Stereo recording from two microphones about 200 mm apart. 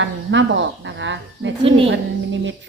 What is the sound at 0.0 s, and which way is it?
A woman's voice, 65° right (ahead or behind).